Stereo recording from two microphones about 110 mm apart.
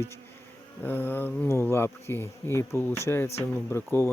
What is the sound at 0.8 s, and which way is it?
Speech, 15° left (ahead or behind).